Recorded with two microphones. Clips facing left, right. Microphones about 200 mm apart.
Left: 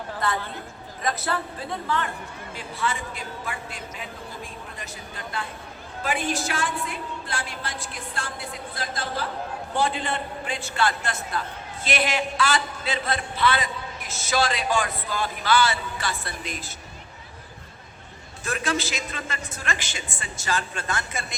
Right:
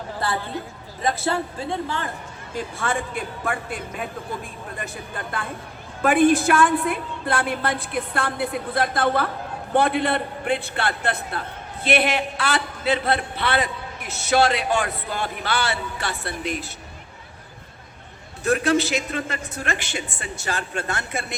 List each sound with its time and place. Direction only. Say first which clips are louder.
0.2 s a sound: right 1 dB; 30° right (ahead or behind)
1.0 s a man's voice: right 4 dB; 25° right (ahead or behind)
2.6 s a man's voice: right 4 dB; 50° right (ahead or behind)
18.4 s a man's voice: right 8 dB; 60° right (ahead or behind)